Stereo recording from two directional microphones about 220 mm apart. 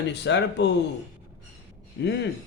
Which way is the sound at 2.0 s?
50° left (ahead or behind).